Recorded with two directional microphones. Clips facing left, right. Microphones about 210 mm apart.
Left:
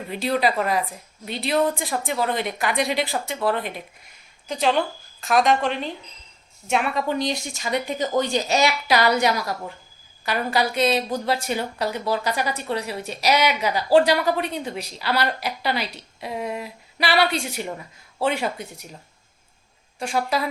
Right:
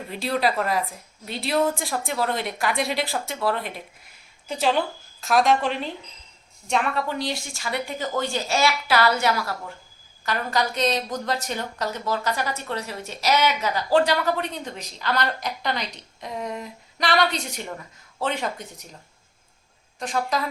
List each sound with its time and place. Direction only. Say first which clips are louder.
0.1 s a woman's voice: left 2 dB; centre (ahead or behind)
6.7 s speech: left 2 dB; 10° left (ahead or behind)
20.0 s speech: left 2 dB; 10° left (ahead or behind)